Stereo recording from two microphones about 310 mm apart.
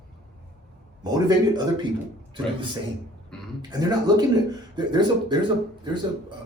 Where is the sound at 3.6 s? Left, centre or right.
Centre.